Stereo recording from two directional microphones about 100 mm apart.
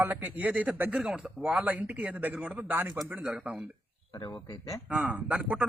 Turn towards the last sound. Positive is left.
turn(degrees=-15)  # may be behind; listen again after turning